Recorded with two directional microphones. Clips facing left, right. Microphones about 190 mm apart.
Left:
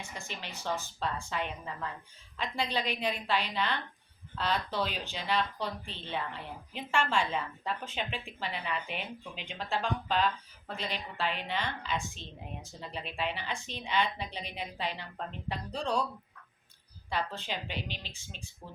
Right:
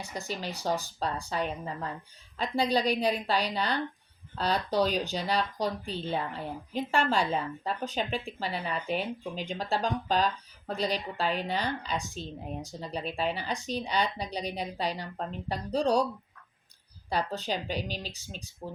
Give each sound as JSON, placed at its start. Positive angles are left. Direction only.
{"t": 0.0, "sound": "speech", "side_deg": -40}
{"t": 17.1, "sound": "speech", "side_deg": -40}